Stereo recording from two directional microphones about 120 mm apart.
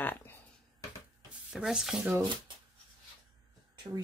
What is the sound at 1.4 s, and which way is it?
Speech, 5° right (ahead or behind).